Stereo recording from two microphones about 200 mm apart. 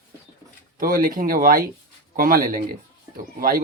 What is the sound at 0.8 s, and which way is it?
Speech, 45° right (ahead or behind).